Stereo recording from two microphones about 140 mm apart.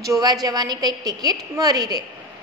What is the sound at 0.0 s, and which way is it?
A woman's voice, 25° right (ahead or behind).